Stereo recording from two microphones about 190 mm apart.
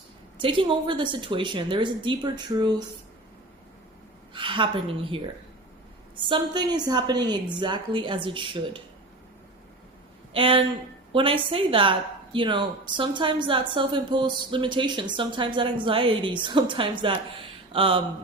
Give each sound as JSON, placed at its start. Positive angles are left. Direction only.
{"t": 0.3, "sound": "a woman's voice", "side_deg": -25}
{"t": 4.4, "sound": "a woman's voice", "side_deg": -25}
{"t": 10.3, "sound": "a woman's voice", "side_deg": -25}